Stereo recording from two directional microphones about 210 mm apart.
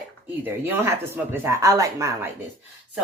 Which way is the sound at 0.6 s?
10° right (ahead or behind).